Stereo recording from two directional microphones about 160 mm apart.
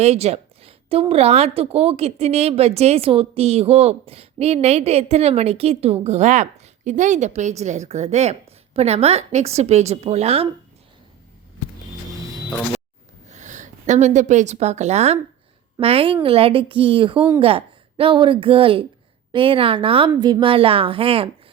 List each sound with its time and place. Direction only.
0.0 s a woman's voice: 45° right (ahead or behind)
13.3 s a woman's voice: 50° right (ahead or behind)